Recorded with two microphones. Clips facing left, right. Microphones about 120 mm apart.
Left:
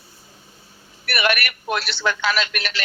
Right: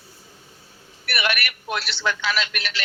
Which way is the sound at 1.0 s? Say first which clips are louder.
Left 4 dB; 50° left (ahead or behind).